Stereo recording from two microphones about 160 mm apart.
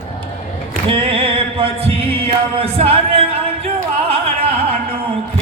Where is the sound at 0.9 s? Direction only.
35° right (ahead or behind).